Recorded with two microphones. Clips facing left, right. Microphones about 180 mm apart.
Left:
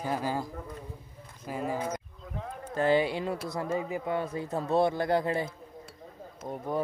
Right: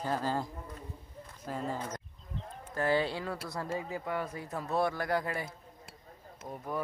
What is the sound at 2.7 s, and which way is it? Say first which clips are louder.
Speech: left 4 dB; 20° left (ahead or behind).